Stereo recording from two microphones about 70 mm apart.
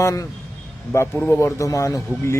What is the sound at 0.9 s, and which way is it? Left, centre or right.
A man's voice, left.